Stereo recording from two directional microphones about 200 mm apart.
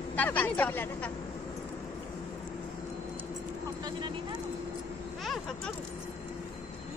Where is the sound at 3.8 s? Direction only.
20° right (ahead or behind).